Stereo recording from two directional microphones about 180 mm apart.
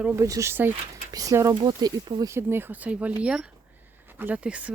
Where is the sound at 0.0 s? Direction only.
15° right (ahead or behind).